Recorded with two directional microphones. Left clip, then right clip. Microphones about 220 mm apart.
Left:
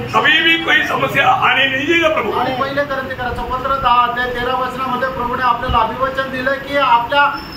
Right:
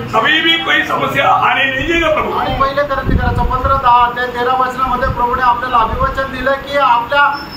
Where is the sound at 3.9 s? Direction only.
10° right (ahead or behind).